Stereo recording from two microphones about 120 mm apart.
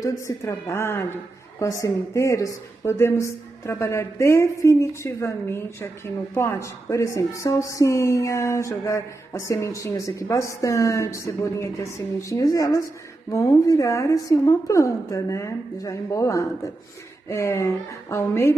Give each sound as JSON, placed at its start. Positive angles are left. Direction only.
{"t": 0.0, "sound": "a woman's voice", "side_deg": 30}